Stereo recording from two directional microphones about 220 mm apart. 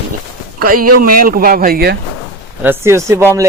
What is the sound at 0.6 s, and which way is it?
Speech, 40° right (ahead or behind).